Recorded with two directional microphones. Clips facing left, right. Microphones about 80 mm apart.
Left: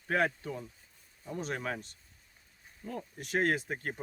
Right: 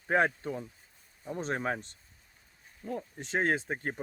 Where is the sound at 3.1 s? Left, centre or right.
Right.